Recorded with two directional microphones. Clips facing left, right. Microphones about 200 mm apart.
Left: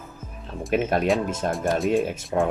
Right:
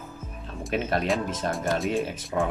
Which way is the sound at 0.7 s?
50° left (ahead or behind).